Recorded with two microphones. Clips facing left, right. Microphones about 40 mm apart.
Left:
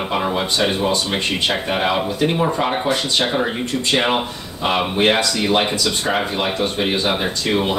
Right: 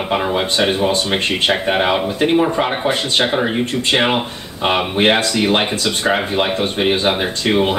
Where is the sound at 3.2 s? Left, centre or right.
Centre.